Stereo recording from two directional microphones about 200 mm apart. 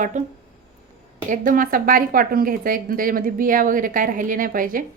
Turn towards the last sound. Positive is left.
turn(degrees=-45)  # may be behind; listen again after turning